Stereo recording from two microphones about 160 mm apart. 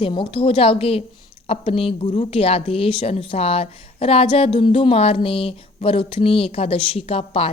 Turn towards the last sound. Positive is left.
turn(degrees=35)  # may be behind; listen again after turning